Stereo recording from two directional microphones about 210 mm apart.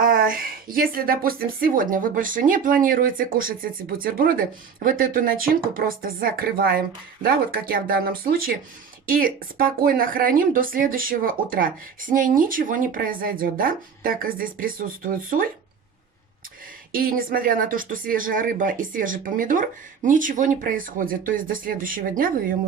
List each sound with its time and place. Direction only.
0.0 s speech: 40° right (ahead or behind)
16.9 s speech: 45° right (ahead or behind)